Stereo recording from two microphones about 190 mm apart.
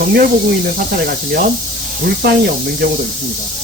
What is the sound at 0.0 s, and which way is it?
Speech, 50° right (ahead or behind).